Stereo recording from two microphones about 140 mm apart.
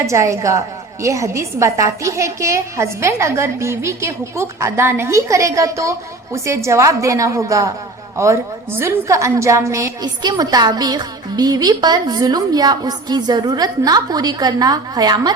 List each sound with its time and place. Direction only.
0.0 s a woman's voice: 20° right (ahead or behind)